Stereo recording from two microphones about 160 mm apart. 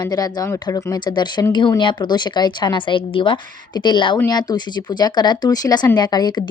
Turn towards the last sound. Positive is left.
turn(degrees=25)  # may be behind; listen again after turning